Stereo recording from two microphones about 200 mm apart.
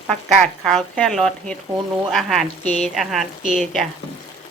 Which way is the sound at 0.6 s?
5° left (ahead or behind).